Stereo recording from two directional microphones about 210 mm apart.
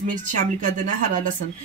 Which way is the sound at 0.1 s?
40° right (ahead or behind).